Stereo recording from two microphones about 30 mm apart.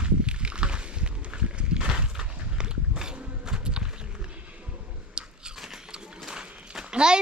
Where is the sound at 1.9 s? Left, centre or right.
Right.